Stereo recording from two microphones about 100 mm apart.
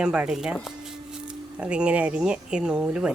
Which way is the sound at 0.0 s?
10° right (ahead or behind).